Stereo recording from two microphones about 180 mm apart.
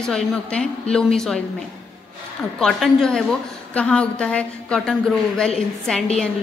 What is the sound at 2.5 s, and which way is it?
A woman's voice, centre (ahead or behind).